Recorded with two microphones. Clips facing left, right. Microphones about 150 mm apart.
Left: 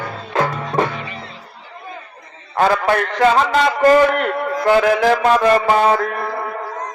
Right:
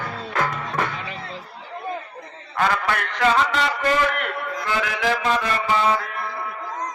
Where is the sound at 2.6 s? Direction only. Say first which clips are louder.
Left 7 dB; 35° left (ahead or behind).